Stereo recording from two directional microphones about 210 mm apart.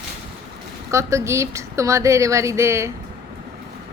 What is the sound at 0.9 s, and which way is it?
A woman's voice, 15° right (ahead or behind).